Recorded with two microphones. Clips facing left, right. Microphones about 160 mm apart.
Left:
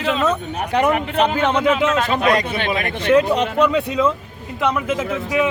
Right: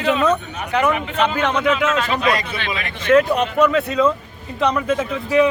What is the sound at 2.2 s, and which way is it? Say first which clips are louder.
Speech: left 3 dB; 55° left (ahead or behind).